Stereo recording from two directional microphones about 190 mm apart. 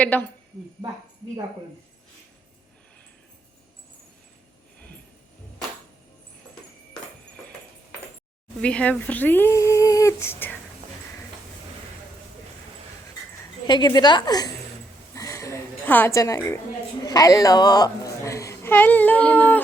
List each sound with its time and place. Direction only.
0.0 s speech: 10° left (ahead or behind)
8.6 s speech: 5° left (ahead or behind)
13.7 s a woman's voice: 25° left (ahead or behind)
15.1 s a sound: 15° left (ahead or behind)
17.1 s speech: 20° left (ahead or behind)